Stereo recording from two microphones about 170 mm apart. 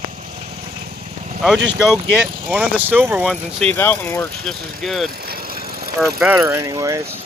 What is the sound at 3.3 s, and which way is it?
Speech, 5° left (ahead or behind).